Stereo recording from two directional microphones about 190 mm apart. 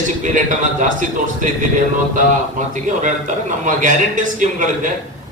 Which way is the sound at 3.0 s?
40° right (ahead or behind).